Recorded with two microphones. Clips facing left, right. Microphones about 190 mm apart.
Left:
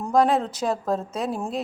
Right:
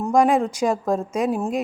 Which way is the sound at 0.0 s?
10° right (ahead or behind).